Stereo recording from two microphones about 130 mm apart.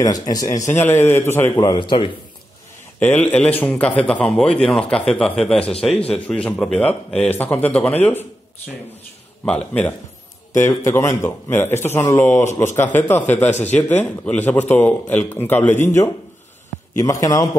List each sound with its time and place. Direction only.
0.0 s speech: 30° left (ahead or behind)
1.6 s a man's voice: 35° left (ahead or behind)
3.0 s a man's voice: 15° left (ahead or behind)
9.4 s a man's voice: 10° left (ahead or behind)
10.5 s a man's voice: 20° left (ahead or behind)
16.9 s speech: 25° left (ahead or behind)